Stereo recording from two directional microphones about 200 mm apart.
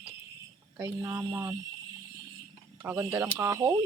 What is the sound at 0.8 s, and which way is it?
Speech, 10° right (ahead or behind).